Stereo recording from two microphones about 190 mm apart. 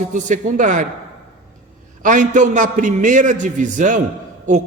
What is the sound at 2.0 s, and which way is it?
A man's voice, 40° right (ahead or behind).